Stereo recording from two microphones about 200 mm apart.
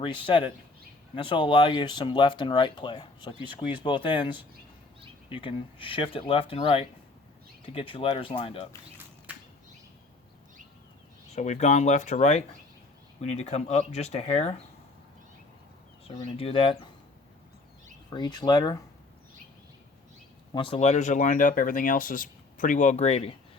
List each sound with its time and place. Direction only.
0.0 s speech: 25° left (ahead or behind)
9.3 s a sound: 5° right (ahead or behind)
11.3 s speech: 35° left (ahead or behind)
16.0 s speech: 30° left (ahead or behind)
18.1 s speech: 20° left (ahead or behind)
20.5 s speech: 25° left (ahead or behind)